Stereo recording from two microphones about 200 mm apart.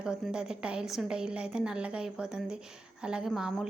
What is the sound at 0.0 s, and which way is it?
A woman's voice, 5° right (ahead or behind).